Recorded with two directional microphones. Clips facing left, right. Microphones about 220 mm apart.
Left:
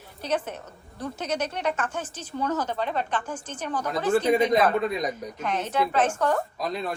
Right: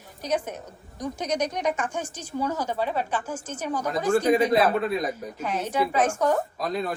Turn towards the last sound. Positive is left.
turn(degrees=0)  # may be behind; listen again after turning